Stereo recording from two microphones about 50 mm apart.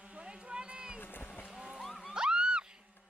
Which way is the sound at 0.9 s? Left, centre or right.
Left.